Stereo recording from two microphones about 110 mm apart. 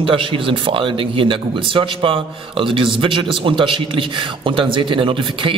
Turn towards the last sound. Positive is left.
turn(degrees=-50)  # may be behind; listen again after turning